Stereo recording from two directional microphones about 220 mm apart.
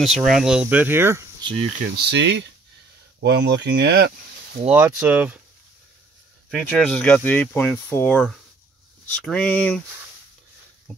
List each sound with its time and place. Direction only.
0.0 s speech: centre (ahead or behind)
1.5 s speech: 25° right (ahead or behind)
2.0 s speech: 50° right (ahead or behind)
4.7 s speech: 10° right (ahead or behind)
6.5 s speech: 5° left (ahead or behind)
10.9 s speech: centre (ahead or behind)